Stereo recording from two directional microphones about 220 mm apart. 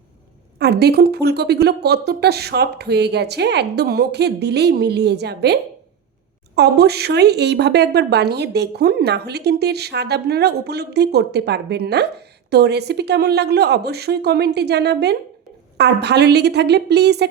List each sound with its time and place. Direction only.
0.6 s a woman's voice: 50° right (ahead or behind)
6.6 s a woman's voice: 45° right (ahead or behind)